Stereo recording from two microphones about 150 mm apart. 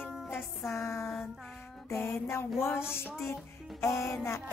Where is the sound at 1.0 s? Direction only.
Centre (ahead or behind).